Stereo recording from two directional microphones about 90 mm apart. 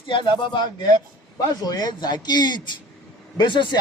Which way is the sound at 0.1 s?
60° left (ahead or behind).